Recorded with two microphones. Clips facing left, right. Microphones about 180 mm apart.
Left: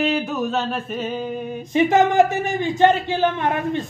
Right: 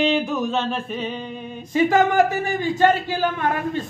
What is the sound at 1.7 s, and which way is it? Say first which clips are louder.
A man's voice: left 1 dB; 20° left (ahead or behind).